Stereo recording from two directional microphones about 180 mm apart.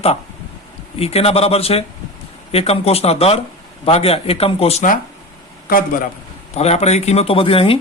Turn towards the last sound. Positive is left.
turn(degrees=30)  # may be behind; listen again after turning